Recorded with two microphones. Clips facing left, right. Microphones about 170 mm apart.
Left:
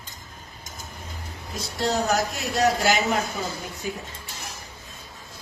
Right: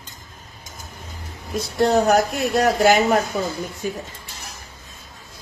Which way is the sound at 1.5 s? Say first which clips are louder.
Right 8 dB; 55° right (ahead or behind).